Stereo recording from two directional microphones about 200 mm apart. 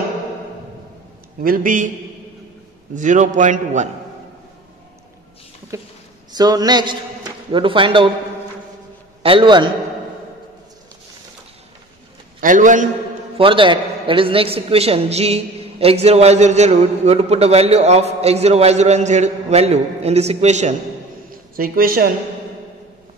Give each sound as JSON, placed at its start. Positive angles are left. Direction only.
{"t": 1.4, "sound": "a man's voice", "side_deg": -45}
{"t": 2.9, "sound": "a man's voice", "side_deg": -40}
{"t": 5.7, "sound": "a man's voice", "side_deg": -15}
{"t": 9.2, "sound": "a man's voice", "side_deg": -25}
{"t": 12.4, "sound": "a man's voice", "side_deg": -40}
{"t": 13.4, "sound": "a man's voice", "side_deg": -25}
{"t": 21.3, "sound": "a man's voice", "side_deg": -45}